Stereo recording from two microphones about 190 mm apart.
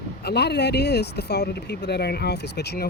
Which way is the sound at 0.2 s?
60° left (ahead or behind).